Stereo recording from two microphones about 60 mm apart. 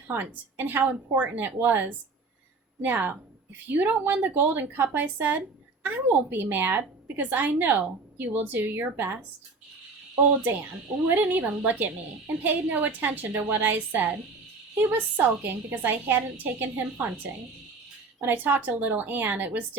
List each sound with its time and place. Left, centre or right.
0.1 s a woman's voice: right
11.1 s a woman's voice: right
18.2 s a woman's voice: right